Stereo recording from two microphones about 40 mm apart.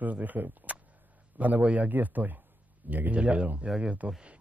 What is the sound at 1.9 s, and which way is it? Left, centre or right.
Speech, right.